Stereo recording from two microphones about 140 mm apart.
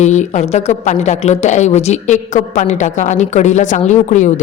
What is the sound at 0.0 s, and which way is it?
A woman's voice, 55° left (ahead or behind).